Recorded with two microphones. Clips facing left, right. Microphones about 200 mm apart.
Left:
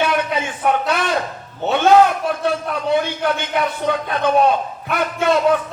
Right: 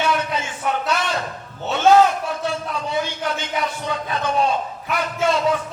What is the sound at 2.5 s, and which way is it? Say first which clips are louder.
A man's voice: left 6 dB; 55° left (ahead or behind).